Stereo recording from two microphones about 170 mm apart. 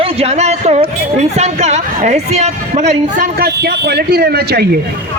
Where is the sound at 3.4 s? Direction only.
70° right (ahead or behind).